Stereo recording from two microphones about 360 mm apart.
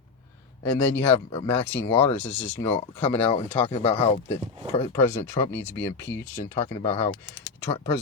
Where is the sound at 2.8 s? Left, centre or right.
Centre.